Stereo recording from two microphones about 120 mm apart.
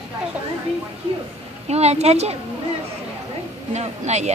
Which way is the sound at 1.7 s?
65° right (ahead or behind).